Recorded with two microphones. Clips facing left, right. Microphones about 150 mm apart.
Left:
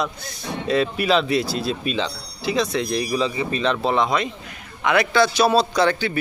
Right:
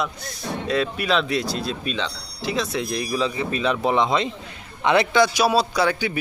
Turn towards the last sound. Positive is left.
turn(degrees=-15)  # may be behind; listen again after turning